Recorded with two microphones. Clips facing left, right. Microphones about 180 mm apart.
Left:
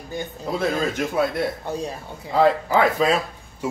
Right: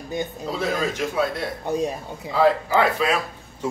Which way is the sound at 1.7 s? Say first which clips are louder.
Right 4 dB; 20° right (ahead or behind).